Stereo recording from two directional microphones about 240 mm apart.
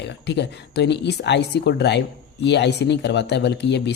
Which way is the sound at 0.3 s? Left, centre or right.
Left.